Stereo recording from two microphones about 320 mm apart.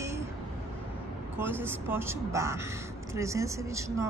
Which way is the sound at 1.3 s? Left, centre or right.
Centre.